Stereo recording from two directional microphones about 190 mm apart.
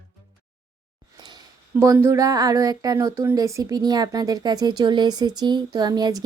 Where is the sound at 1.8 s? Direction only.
15° right (ahead or behind).